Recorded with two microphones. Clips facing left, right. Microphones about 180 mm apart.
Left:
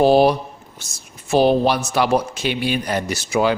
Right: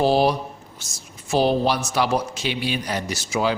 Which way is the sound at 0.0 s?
60° left (ahead or behind).